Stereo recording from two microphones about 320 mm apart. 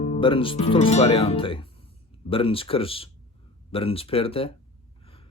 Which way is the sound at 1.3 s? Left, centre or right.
Centre.